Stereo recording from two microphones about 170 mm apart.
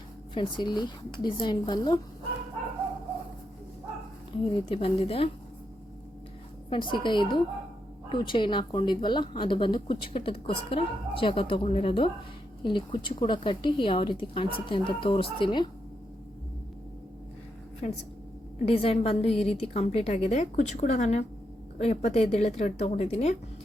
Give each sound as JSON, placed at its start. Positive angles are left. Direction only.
{"t": 0.3, "sound": "a woman's voice", "side_deg": 25}
{"t": 4.4, "sound": "a woman's voice", "side_deg": 30}
{"t": 6.7, "sound": "a woman's voice", "side_deg": 30}
{"t": 17.8, "sound": "a woman's voice", "side_deg": 40}